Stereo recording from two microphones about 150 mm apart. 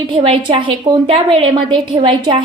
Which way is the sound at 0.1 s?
35° right (ahead or behind).